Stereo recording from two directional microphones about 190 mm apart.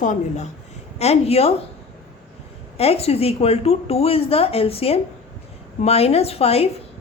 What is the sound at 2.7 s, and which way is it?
A woman's voice, 30° left (ahead or behind).